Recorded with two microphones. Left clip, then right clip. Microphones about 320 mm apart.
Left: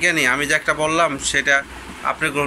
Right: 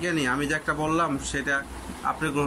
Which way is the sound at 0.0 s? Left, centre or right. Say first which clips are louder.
Left 9 dB; centre.